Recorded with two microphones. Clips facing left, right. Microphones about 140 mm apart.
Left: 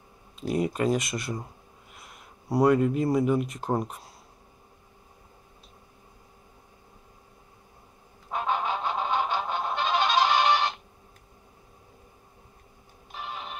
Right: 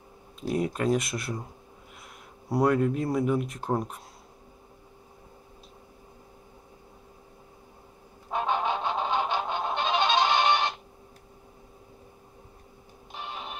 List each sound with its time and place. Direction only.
0.4 s speech: centre (ahead or behind)
2.5 s speech: centre (ahead or behind)
8.6 s music: 25° right (ahead or behind)